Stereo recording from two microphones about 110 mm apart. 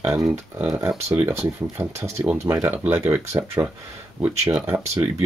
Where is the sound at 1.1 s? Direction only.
20° right (ahead or behind).